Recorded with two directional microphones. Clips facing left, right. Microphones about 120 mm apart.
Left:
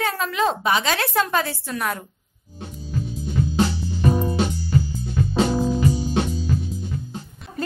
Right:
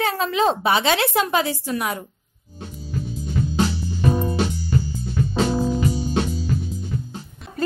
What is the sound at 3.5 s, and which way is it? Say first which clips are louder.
Music: even; centre (ahead or behind).